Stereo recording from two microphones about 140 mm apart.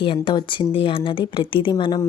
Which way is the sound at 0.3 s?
35° left (ahead or behind).